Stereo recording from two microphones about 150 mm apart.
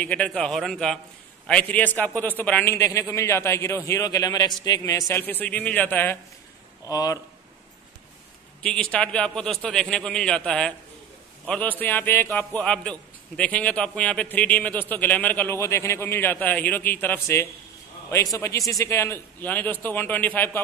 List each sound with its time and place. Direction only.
0.0 s a man's voice: 10° left (ahead or behind)
6.9 s a man's voice: 25° left (ahead or behind)
8.6 s a man's voice: 5° left (ahead or behind)